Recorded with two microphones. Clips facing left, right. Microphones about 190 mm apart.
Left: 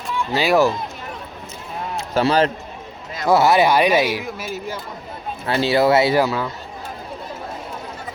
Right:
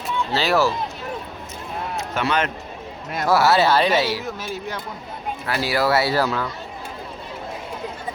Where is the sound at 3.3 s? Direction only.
20° left (ahead or behind).